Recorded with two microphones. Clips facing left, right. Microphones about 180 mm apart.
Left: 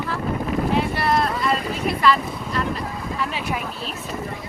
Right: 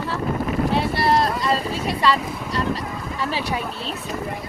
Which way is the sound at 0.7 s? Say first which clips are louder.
Right 1 dB; 35° right (ahead or behind).